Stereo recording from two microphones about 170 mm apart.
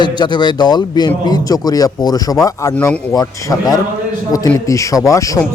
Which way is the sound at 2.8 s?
10° left (ahead or behind).